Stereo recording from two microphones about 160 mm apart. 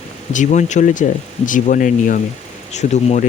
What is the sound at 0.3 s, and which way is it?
Speech, 50° left (ahead or behind).